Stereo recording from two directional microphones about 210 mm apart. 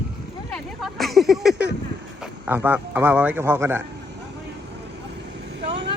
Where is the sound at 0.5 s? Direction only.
Centre (ahead or behind).